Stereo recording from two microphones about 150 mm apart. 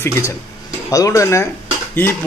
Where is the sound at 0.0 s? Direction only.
20° left (ahead or behind).